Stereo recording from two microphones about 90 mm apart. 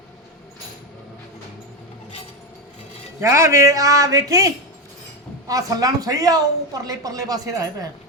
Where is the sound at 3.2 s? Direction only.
35° right (ahead or behind).